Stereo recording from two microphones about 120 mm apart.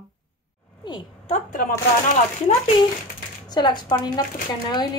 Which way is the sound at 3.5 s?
35° left (ahead or behind).